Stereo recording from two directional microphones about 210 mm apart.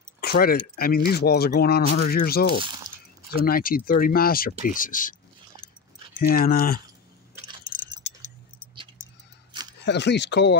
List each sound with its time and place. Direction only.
0.2 s speech: 45° left (ahead or behind)
2.6 s speech: 20° right (ahead or behind)
3.4 s speech: 45° left (ahead or behind)
6.1 s speech: 45° left (ahead or behind)
9.5 s a sound: 20° right (ahead or behind)
9.8 s speech: 55° left (ahead or behind)